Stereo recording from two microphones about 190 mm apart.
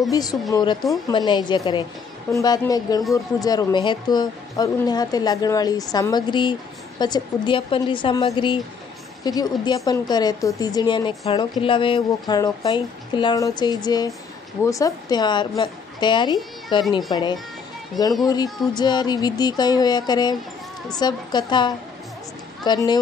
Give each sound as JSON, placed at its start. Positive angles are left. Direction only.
{"t": 0.1, "sound": "a woman's voice", "side_deg": 20}